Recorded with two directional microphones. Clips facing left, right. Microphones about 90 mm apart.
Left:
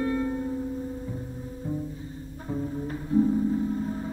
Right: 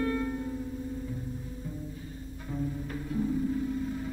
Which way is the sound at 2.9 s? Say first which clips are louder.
Left 10 dB; 30° left (ahead or behind).